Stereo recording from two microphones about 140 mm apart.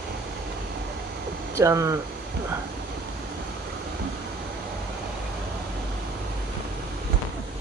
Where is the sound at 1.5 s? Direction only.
20° right (ahead or behind).